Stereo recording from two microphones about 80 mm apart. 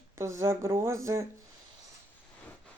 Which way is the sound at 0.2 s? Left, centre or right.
Right.